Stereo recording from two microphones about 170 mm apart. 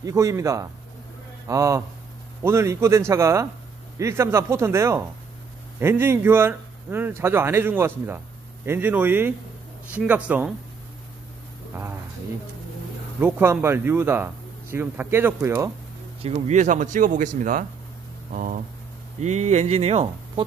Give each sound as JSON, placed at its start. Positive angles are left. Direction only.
{"t": 0.0, "sound": "speech", "side_deg": -20}
{"t": 13.2, "sound": "speech", "side_deg": -15}
{"t": 16.2, "sound": "speech", "side_deg": -35}